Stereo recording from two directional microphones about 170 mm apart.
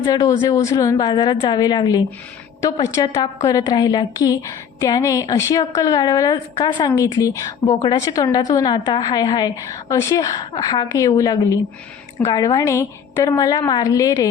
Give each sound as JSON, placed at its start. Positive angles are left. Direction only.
{"t": 0.0, "sound": "a woman's voice", "side_deg": 20}